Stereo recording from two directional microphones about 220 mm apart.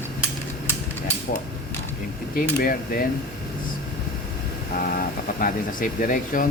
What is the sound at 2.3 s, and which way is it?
Speech, 40° left (ahead or behind).